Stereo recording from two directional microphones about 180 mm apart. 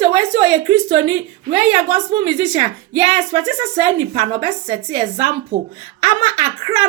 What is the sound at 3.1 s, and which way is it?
Speech, 25° right (ahead or behind).